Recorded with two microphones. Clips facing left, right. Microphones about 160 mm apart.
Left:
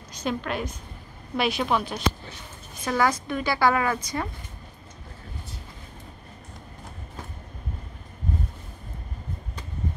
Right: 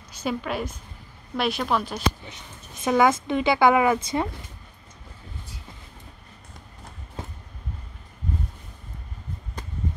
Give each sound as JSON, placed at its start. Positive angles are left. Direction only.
{"t": 0.1, "sound": "a woman's voice", "side_deg": -5}
{"t": 2.8, "sound": "a woman's voice", "side_deg": -20}